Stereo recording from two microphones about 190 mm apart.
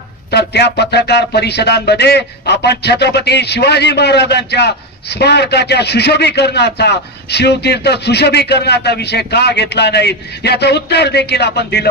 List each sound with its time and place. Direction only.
0.3 s speech: 60° left (ahead or behind)